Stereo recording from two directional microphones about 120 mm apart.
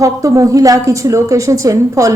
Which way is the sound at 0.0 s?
25° right (ahead or behind).